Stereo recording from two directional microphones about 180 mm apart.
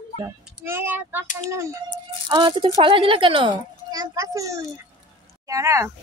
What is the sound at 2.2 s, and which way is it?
A child's voice, 25° right (ahead or behind).